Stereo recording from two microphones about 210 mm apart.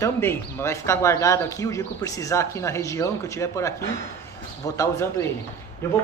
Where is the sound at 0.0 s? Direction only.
10° left (ahead or behind).